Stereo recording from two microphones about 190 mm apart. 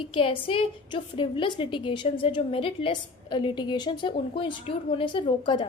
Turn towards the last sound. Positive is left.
turn(degrees=25)  # may be behind; listen again after turning